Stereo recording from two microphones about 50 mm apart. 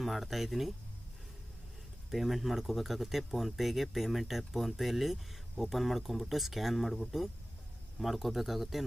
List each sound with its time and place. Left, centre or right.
0.0 s speech: centre
2.0 s speech: centre